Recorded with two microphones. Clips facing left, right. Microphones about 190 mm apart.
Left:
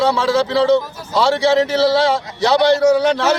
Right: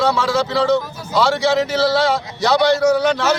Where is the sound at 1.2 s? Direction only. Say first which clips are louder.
Left 2 dB; 30° left (ahead or behind).